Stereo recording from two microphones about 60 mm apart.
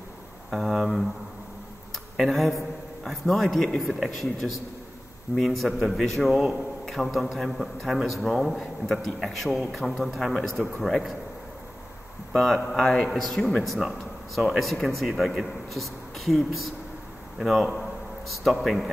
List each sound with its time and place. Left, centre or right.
0.5 s a man's voice: centre
2.1 s a man's voice: centre
12.3 s a man's voice: centre
13.4 s a man's voice: centre
13.7 s a man's voice: centre